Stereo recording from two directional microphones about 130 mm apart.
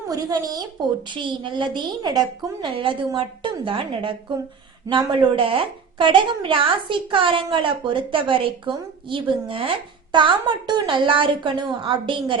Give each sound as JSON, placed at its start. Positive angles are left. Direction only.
{"t": 0.1, "sound": "a woman's voice", "side_deg": -30}